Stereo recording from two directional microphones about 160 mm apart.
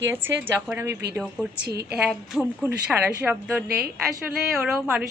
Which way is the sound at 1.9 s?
5° right (ahead or behind).